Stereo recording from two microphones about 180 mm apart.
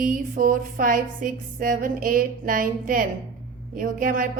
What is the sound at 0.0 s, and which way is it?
Music, 50° right (ahead or behind).